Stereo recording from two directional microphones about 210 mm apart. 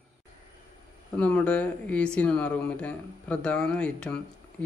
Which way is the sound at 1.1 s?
5° left (ahead or behind).